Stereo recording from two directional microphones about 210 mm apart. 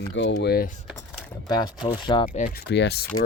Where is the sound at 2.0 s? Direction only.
25° left (ahead or behind).